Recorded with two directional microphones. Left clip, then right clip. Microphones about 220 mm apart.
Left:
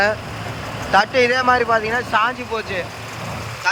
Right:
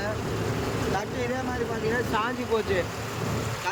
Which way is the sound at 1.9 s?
10° right (ahead or behind).